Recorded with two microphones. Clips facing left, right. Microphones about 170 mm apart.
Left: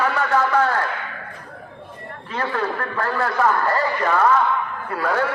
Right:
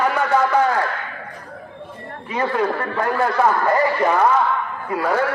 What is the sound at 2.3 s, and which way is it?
A man's voice, 15° right (ahead or behind).